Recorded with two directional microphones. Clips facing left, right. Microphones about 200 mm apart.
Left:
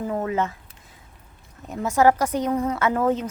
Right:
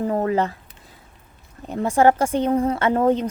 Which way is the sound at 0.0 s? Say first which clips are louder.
Right 4 dB; 40° right (ahead or behind).